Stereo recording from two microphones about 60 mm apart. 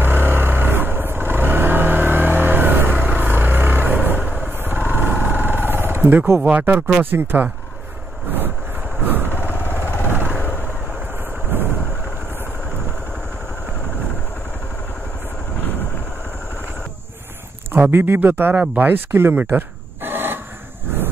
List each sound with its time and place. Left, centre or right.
0.0 s vehicle: right
6.4 s speech: right
9.0 s vehicle: right
9.3 s vehicle: left
10.0 s vehicle: right
10.3 s vehicle: left
11.5 s vehicle: right
17.9 s speech: right
19.5 s a sound: right